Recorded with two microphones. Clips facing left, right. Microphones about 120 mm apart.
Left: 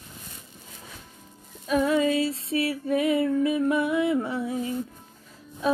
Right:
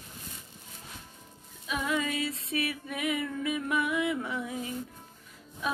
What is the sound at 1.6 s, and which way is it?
Female singing, 40° left (ahead or behind).